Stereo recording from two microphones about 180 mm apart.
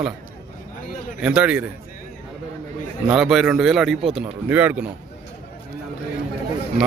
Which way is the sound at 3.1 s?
Centre (ahead or behind).